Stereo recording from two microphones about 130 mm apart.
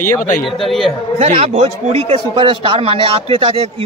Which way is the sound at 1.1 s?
55° right (ahead or behind).